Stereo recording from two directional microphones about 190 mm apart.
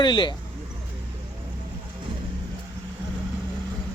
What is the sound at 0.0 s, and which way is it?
Speech, 25° left (ahead or behind).